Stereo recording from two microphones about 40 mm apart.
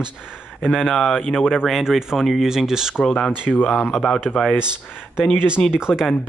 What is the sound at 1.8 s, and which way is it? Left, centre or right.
Speech, centre.